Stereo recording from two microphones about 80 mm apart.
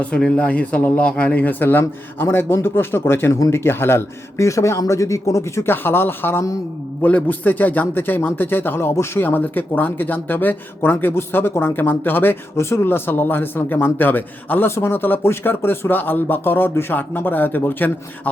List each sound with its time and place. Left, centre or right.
0.0 s a man's voice: centre